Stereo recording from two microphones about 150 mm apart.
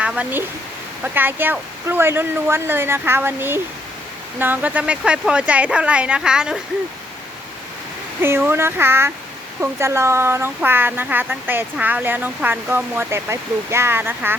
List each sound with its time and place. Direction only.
0.0 s speech: 10° right (ahead or behind)
8.2 s speech: 15° right (ahead or behind)